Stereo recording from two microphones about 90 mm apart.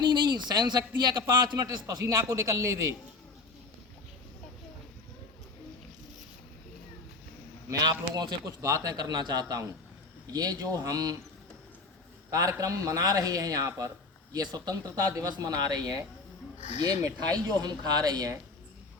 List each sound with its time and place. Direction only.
0.0 s speech: 55° right (ahead or behind); by 2.8 s 40° right (ahead or behind)
7.7 s a man's voice: 50° right (ahead or behind)
12.3 s a man's voice: 40° right (ahead or behind)
17.3 s speech: 45° right (ahead or behind)